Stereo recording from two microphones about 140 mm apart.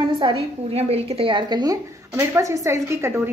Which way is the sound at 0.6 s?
45° right (ahead or behind).